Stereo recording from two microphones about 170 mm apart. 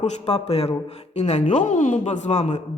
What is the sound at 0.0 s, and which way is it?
Speech, 40° left (ahead or behind).